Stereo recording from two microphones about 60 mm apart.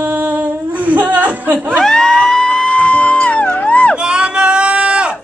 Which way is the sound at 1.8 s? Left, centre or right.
Centre.